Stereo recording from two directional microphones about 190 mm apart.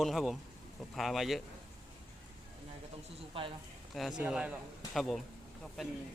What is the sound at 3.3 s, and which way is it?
Speech, 30° right (ahead or behind).